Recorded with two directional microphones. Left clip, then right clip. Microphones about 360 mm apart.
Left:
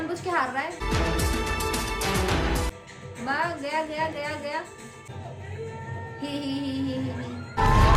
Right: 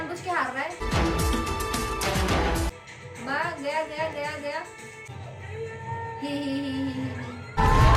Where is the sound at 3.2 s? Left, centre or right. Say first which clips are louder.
Left 1 dB; centre.